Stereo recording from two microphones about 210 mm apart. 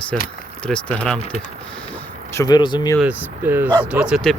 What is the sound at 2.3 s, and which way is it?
Speech, 20° left (ahead or behind).